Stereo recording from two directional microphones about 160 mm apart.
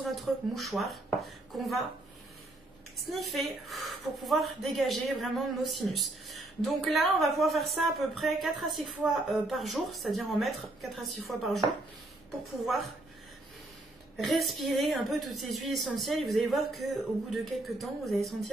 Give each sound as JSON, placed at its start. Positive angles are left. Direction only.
{"t": 0.0, "sound": "speech", "side_deg": 0}
{"t": 3.1, "sound": "a woman's voice", "side_deg": 0}
{"t": 14.1, "sound": "a woman's voice", "side_deg": 0}